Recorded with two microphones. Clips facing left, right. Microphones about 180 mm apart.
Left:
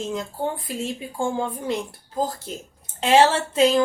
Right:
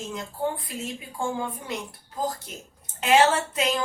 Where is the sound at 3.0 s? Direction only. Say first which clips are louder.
Left 3 dB; 30° left (ahead or behind).